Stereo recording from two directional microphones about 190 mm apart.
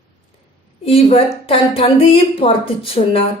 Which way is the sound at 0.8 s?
30° left (ahead or behind).